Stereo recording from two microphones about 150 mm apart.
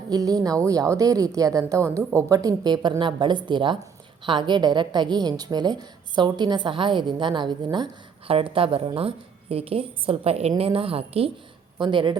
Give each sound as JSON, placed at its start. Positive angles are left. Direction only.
{"t": 0.1, "sound": "a woman's voice", "side_deg": -25}